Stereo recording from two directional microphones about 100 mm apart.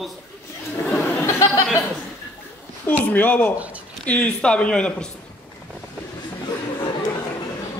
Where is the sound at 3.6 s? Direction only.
15° right (ahead or behind).